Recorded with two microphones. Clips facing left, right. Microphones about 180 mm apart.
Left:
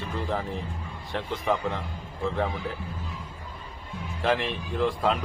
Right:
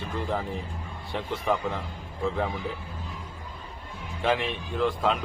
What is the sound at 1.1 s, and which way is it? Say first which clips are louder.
Speech: even; 5° right (ahead or behind).